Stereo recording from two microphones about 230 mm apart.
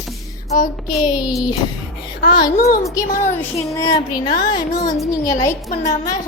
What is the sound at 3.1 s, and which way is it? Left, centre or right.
Speech, left.